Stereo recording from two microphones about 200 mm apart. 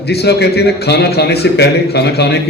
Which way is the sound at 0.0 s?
55° left (ahead or behind).